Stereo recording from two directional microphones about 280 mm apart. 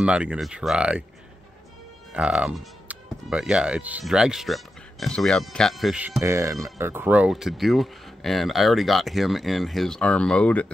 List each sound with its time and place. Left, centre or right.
0.0 s speech: centre
2.1 s speech: centre